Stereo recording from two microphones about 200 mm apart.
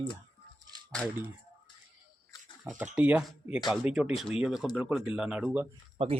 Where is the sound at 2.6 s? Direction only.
5° right (ahead or behind).